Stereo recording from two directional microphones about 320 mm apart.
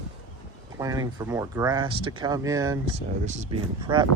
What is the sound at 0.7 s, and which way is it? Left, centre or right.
Speech, centre.